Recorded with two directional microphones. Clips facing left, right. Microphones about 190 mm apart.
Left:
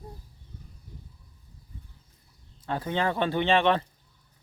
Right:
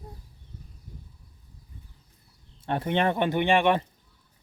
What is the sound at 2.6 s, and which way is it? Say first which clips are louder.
Speech: right 3 dB; 25° right (ahead or behind).